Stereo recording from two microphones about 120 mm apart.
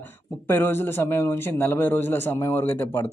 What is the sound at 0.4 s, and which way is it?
A man's voice, 15° left (ahead or behind).